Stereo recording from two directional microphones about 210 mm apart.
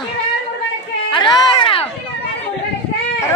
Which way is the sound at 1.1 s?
25° left (ahead or behind).